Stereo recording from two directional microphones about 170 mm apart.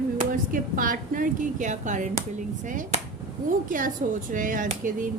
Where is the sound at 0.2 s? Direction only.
55° right (ahead or behind).